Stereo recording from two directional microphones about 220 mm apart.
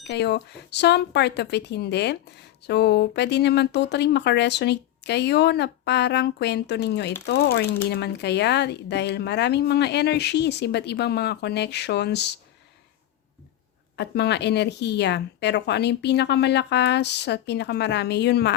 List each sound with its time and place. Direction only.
0.0 s speech: 50° left (ahead or behind)
13.9 s speech: 50° left (ahead or behind)